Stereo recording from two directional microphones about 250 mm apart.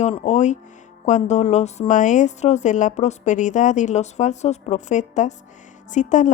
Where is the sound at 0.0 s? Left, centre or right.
Left.